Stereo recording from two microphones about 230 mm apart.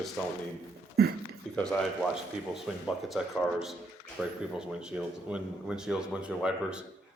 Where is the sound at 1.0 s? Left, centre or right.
Right.